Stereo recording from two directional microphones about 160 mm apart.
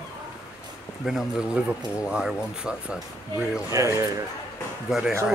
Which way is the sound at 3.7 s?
20° right (ahead or behind).